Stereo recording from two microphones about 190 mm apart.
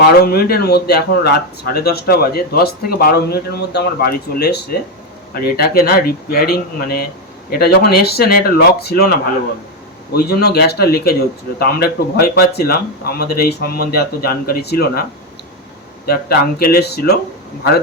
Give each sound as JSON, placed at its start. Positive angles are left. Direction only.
{"t": 0.0, "sound": "a man's voice", "side_deg": 55}
{"t": 10.1, "sound": "a man's voice", "side_deg": 55}
{"t": 16.0, "sound": "a man's voice", "side_deg": 55}